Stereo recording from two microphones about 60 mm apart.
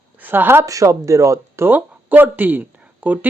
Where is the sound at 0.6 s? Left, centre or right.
Right.